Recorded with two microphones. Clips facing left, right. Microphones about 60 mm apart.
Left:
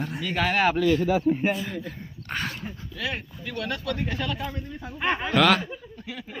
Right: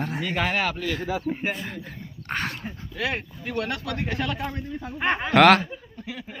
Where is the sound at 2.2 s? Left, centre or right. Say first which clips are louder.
Right 2 dB; right.